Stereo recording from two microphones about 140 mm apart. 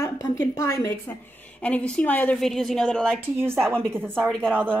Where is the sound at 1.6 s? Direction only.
10° left (ahead or behind).